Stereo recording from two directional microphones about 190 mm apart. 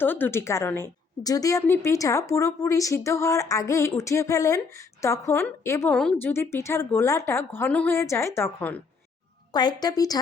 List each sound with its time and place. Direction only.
0.0 s a woman's voice: 10° left (ahead or behind)
9.5 s a woman's voice: 20° left (ahead or behind)